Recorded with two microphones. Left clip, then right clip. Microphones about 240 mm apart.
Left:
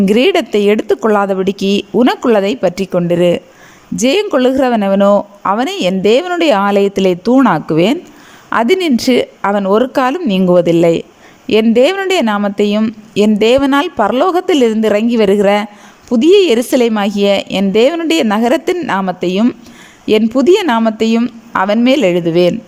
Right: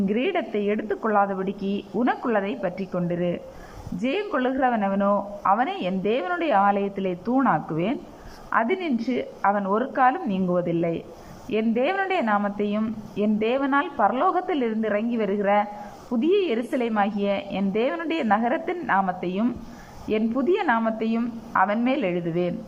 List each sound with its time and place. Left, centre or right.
0.0 s speech: left